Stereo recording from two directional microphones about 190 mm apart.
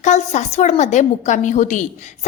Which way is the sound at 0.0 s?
40° left (ahead or behind).